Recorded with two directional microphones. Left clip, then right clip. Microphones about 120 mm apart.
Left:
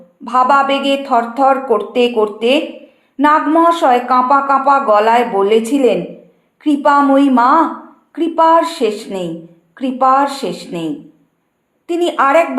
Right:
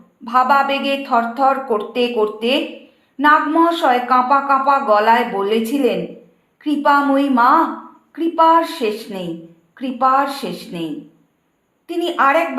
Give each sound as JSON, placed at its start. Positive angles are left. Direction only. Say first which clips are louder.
{"t": 0.3, "sound": "a woman's voice", "louder": "left 3 dB", "side_deg": 40}
{"t": 11.9, "sound": "a woman's voice", "louder": "left 3 dB", "side_deg": 40}